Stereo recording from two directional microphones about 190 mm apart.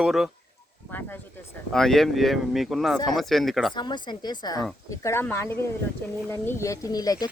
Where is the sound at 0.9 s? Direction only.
10° left (ahead or behind).